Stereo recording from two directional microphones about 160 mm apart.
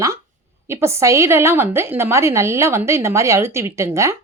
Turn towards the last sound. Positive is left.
turn(degrees=-20)  # may be behind; listen again after turning